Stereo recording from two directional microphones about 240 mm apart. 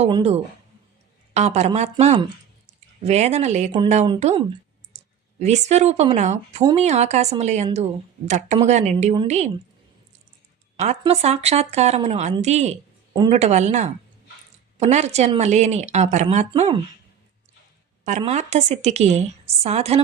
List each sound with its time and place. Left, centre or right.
0.0 s speech: right
6.6 s speech: centre
6.8 s speech: right
10.8 s speech: right
18.0 s speech: right